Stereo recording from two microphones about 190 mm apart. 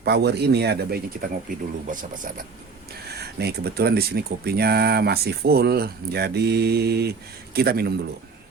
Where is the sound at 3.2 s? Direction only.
60° right (ahead or behind).